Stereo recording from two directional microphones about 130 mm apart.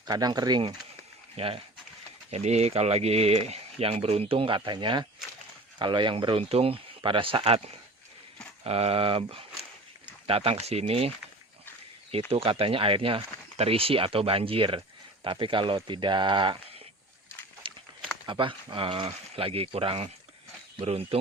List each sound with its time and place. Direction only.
0.0 s speech: 30° right (ahead or behind)
2.3 s speech: 55° right (ahead or behind)
8.6 s speech: 50° right (ahead or behind)
12.3 s speech: 45° right (ahead or behind)
18.3 s speech: 40° right (ahead or behind)